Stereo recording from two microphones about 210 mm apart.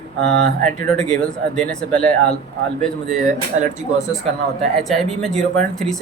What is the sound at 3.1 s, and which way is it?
Speech, 35° right (ahead or behind).